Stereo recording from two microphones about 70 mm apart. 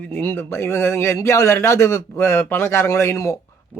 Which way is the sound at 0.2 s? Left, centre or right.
Left.